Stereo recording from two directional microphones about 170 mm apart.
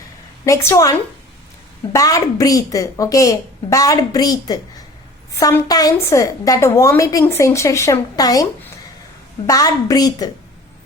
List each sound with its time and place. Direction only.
0.4 s a woman's voice: 15° left (ahead or behind)
9.5 s a woman's voice: 20° left (ahead or behind)